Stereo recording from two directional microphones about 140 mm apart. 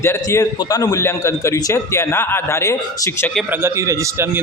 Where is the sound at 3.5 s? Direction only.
20° right (ahead or behind).